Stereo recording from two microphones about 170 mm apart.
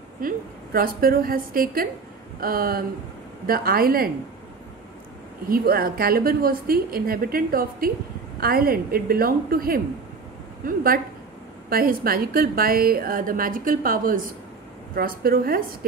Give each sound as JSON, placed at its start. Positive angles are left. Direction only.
{"t": 0.2, "sound": "a woman's voice", "side_deg": -55}
{"t": 5.5, "sound": "a woman's voice", "side_deg": -60}